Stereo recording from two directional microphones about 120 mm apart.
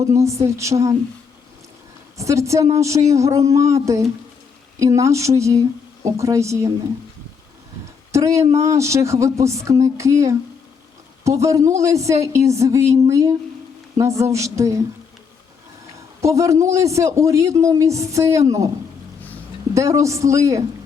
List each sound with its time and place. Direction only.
0.0 s a man's voice: 25° right (ahead or behind)
2.1 s a man's voice: 25° right (ahead or behind)
8.1 s a man's voice: 25° right (ahead or behind)
16.2 s a man's voice: 25° right (ahead or behind)
19.7 s a man's voice: 25° right (ahead or behind)